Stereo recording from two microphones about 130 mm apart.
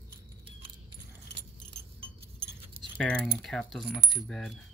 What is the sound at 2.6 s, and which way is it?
Keys jangling, 45° right (ahead or behind).